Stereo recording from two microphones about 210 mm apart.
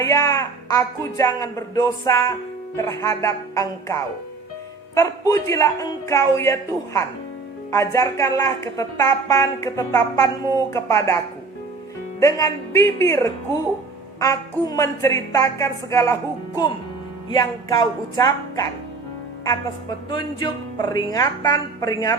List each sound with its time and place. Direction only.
0.0 s speech: 15° left (ahead or behind)
12.2 s speech: 15° left (ahead or behind)
17.2 s speech: 20° left (ahead or behind)
20.1 s speech: 20° left (ahead or behind)